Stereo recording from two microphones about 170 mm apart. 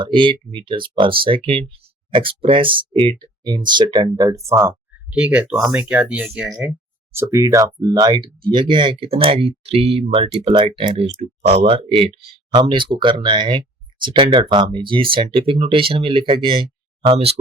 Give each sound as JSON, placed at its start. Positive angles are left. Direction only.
{"t": 0.0, "sound": "speech", "side_deg": -30}
{"t": 7.1, "sound": "speech", "side_deg": -15}